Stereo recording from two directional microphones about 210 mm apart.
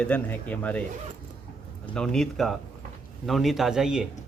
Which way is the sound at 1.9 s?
5° left (ahead or behind).